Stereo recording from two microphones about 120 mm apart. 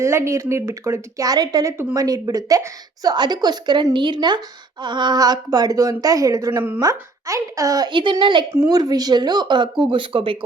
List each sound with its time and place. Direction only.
0.0 s a woman's voice: 25° right (ahead or behind)
6.7 s a woman's voice: 30° right (ahead or behind); by 10.3 s 45° right (ahead or behind)